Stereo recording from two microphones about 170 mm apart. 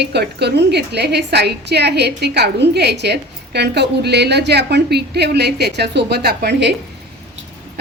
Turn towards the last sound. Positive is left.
turn(degrees=-80)